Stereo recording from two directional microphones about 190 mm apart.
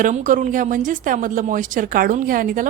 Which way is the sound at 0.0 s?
45° right (ahead or behind).